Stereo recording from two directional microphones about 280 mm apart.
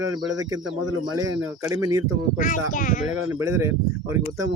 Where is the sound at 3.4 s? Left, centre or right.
Centre.